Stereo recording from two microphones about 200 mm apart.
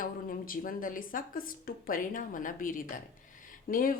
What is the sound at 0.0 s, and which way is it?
A woman's voice, 45° left (ahead or behind).